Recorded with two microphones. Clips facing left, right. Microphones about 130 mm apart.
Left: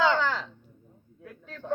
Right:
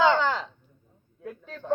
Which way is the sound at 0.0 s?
20° right (ahead or behind).